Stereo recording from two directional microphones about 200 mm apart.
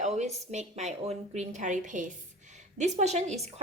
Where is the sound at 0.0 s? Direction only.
35° right (ahead or behind).